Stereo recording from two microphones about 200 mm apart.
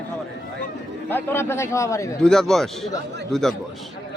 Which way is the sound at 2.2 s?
5° left (ahead or behind).